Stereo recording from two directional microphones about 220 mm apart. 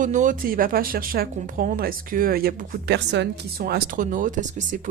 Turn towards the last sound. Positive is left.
turn(degrees=-35)  # may be behind; listen again after turning